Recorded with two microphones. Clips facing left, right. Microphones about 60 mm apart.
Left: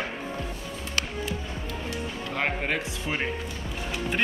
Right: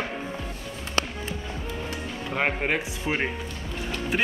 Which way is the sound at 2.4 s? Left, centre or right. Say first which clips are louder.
Right 3 dB; centre.